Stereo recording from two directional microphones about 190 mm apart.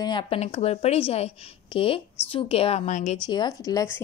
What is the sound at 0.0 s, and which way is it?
A woman's voice, 25° left (ahead or behind).